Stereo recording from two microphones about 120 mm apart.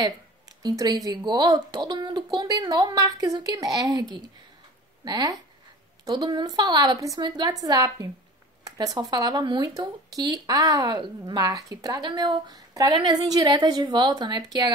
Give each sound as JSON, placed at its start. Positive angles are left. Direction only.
{"t": 0.6, "sound": "speech", "side_deg": -35}
{"t": 5.0, "sound": "speech", "side_deg": -35}